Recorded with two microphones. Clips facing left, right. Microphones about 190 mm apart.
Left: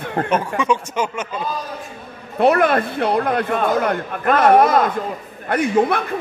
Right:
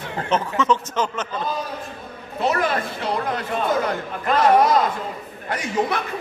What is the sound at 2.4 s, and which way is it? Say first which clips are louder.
Speech: left 7 dB; 60° left (ahead or behind).